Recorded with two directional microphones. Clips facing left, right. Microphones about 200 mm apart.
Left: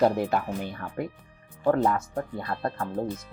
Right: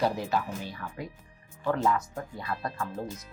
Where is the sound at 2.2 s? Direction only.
55° left (ahead or behind).